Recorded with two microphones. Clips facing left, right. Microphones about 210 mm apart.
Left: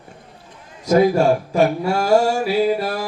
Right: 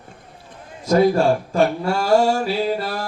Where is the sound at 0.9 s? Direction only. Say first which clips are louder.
Left 1 dB; 10° left (ahead or behind).